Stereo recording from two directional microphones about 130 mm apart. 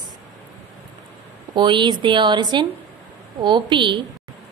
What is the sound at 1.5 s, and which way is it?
A woman's voice, 35° right (ahead or behind).